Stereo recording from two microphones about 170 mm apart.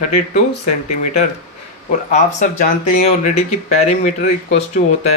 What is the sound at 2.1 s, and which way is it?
Speech, 50° left (ahead or behind).